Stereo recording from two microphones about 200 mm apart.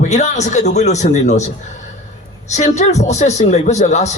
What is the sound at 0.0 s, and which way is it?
Speech, 35° left (ahead or behind).